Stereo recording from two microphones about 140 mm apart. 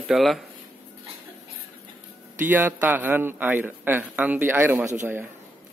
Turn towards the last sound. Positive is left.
turn(degrees=-15)  # may be behind; listen again after turning